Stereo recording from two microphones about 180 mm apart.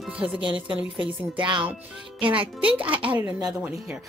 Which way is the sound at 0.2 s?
30° right (ahead or behind).